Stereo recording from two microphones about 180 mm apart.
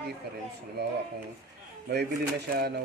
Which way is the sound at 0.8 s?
65° right (ahead or behind).